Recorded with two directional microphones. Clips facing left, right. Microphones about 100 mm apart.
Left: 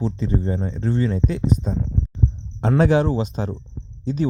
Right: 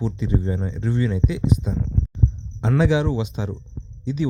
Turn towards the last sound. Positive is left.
turn(degrees=45)  # may be behind; listen again after turning